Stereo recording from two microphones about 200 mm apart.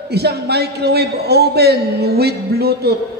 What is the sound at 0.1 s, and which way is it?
A man's voice, 55° right (ahead or behind).